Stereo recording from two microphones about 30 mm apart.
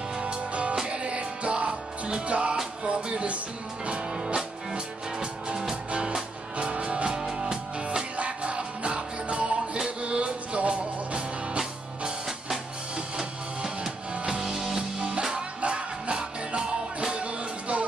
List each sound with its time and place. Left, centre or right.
0.5 s music: right
4.1 s music: right
5.9 s music: right
7.1 s music: right
13.2 s music: centre
14.1 s music: right
14.4 s music: centre
15.3 s music: right
17.2 s music: right